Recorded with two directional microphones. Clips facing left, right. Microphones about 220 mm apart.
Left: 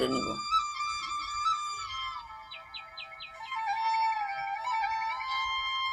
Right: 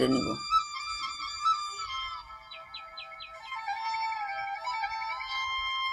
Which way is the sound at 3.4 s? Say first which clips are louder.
Left 4 dB; 40° right (ahead or behind).